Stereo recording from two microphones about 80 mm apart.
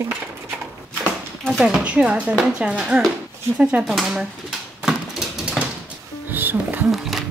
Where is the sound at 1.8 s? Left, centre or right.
Centre.